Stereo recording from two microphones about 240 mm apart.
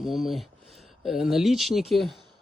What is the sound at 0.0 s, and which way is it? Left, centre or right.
A man's voice, centre.